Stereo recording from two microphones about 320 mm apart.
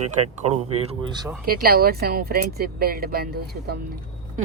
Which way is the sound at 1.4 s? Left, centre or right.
Right.